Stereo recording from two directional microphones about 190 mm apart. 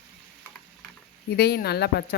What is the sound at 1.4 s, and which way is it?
Speech, 55° left (ahead or behind).